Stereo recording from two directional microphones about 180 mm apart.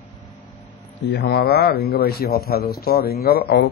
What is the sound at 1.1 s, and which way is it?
A man's voice, 60° left (ahead or behind).